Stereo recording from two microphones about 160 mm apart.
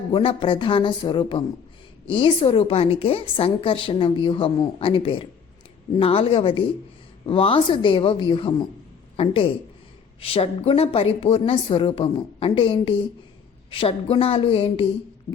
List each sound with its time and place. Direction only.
0.1 s a woman's voice: 35° left (ahead or behind)